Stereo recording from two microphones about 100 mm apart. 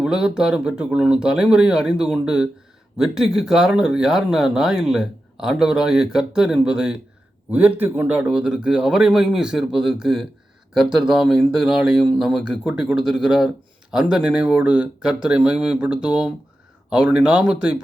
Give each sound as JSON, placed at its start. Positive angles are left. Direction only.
{"t": 0.0, "sound": "speech", "side_deg": -5}